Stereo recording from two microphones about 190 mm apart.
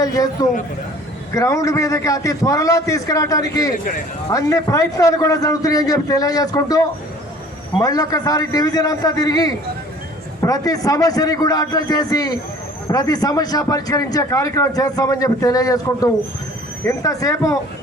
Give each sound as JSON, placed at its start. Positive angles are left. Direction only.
{"t": 0.0, "sound": "a man's voice", "side_deg": 20}